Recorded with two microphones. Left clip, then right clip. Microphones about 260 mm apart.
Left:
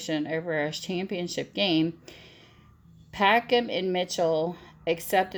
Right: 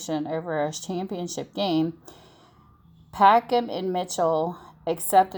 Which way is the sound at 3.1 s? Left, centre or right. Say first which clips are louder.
Right 4 dB; right.